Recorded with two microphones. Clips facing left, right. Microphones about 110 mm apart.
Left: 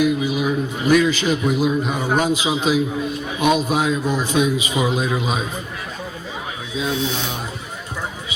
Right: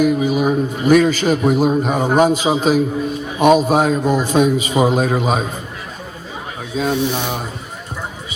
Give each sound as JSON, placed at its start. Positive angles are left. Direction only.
{"t": 0.0, "sound": "a man's voice", "side_deg": -45}
{"t": 6.7, "sound": "a man's voice", "side_deg": -45}